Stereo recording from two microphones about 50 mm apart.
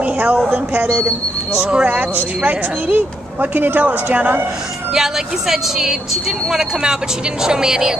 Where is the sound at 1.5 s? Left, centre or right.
Right.